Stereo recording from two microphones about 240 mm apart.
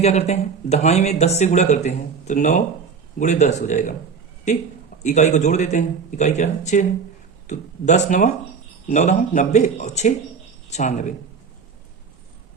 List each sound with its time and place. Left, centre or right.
0.0 s speech: left
5.0 s speech: left